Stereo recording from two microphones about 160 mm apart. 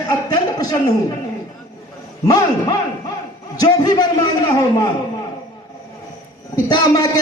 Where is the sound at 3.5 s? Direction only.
25° left (ahead or behind).